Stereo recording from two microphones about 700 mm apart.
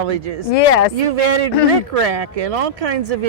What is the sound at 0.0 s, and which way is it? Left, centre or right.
Speech, right.